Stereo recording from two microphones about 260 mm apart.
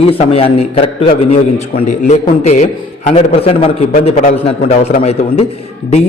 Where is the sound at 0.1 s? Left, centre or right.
Left.